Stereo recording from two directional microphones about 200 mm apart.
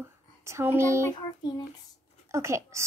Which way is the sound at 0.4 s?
15° right (ahead or behind).